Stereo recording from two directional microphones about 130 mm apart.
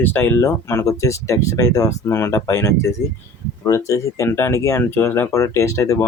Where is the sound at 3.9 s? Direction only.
20° left (ahead or behind).